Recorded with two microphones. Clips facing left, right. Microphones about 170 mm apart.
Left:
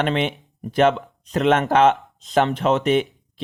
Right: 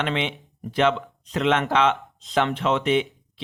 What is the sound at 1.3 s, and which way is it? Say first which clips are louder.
Speech: left 4 dB; 45° left (ahead or behind).